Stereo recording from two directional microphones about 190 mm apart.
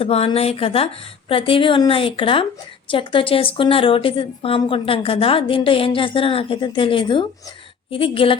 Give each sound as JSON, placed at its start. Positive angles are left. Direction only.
{"t": 0.0, "sound": "a woman's voice", "side_deg": 30}